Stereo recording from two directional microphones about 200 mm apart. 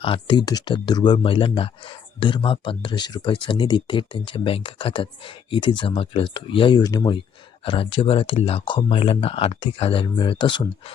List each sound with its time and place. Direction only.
0.0 s speech: 25° left (ahead or behind)